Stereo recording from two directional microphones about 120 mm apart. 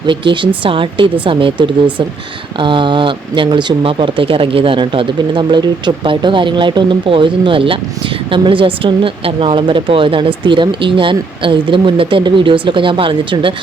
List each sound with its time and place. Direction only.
0.1 s speech: 45° right (ahead or behind)